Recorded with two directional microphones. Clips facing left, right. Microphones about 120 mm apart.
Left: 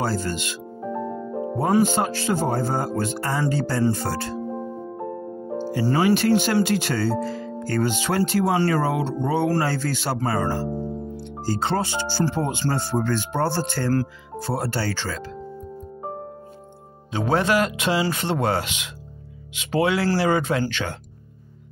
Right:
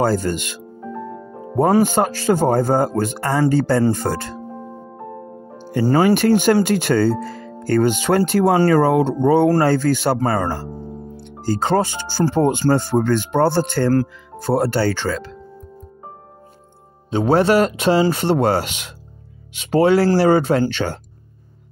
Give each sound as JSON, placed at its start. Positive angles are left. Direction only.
{"t": 0.0, "sound": "speech", "side_deg": -50}
{"t": 1.8, "sound": "speech", "side_deg": -50}
{"t": 5.7, "sound": "speech", "side_deg": -45}
{"t": 17.1, "sound": "speech", "side_deg": -30}
{"t": 19.7, "sound": "speech", "side_deg": -40}